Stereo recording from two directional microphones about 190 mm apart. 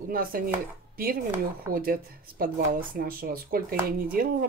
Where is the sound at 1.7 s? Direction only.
50° right (ahead or behind).